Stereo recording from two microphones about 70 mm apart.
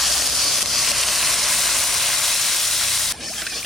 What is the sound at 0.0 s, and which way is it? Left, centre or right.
Sizzle, centre.